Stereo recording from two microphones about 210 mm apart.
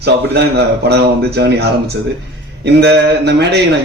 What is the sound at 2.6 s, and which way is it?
Speech, 50° right (ahead or behind).